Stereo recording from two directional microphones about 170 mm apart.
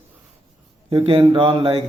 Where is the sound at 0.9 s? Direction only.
35° right (ahead or behind).